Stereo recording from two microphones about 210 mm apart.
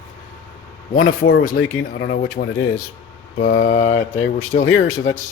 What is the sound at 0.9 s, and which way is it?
Speech, 40° left (ahead or behind).